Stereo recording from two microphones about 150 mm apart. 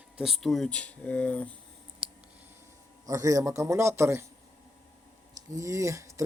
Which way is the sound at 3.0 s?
20° right (ahead or behind).